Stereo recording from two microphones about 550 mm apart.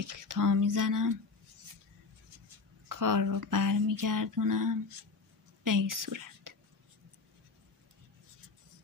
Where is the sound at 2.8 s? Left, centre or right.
Right.